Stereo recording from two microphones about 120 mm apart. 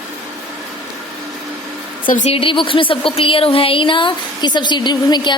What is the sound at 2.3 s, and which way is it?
Speech, 45° left (ahead or behind).